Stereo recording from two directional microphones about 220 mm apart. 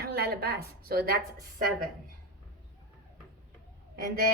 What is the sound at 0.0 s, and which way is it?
A woman's voice, 45° right (ahead or behind).